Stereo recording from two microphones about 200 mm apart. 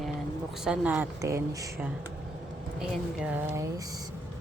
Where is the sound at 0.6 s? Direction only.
5° right (ahead or behind).